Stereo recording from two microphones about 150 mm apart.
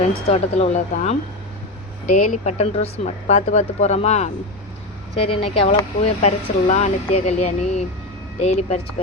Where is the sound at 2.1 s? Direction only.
55° left (ahead or behind).